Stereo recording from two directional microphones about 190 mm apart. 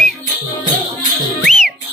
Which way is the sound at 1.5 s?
45° right (ahead or behind).